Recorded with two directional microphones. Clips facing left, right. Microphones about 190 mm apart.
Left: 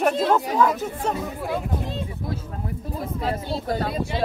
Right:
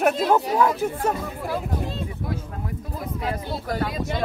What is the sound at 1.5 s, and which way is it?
Speech, 20° left (ahead or behind).